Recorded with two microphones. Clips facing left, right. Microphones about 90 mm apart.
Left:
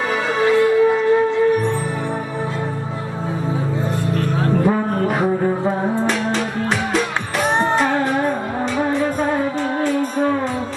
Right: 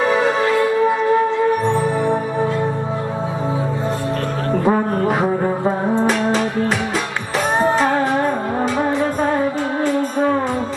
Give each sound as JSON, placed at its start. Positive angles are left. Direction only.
{"t": 4.6, "sound": "music", "side_deg": -25}
{"t": 5.1, "sound": "music", "side_deg": -15}